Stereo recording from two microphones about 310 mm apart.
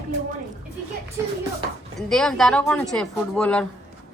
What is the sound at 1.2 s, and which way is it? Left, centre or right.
Speech, centre.